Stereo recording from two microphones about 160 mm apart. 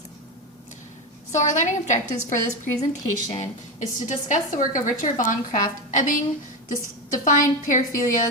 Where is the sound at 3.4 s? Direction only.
50° left (ahead or behind).